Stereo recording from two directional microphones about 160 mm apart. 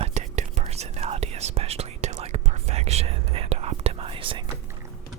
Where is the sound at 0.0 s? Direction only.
45° right (ahead or behind).